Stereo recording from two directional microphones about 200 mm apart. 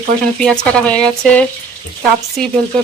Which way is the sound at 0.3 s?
5° left (ahead or behind).